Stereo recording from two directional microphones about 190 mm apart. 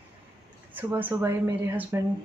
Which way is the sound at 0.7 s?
10° right (ahead or behind).